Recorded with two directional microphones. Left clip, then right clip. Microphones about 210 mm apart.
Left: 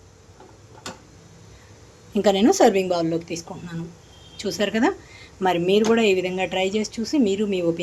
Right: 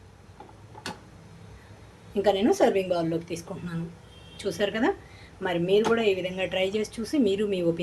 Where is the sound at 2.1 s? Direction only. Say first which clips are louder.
Left 5 dB; 40° left (ahead or behind).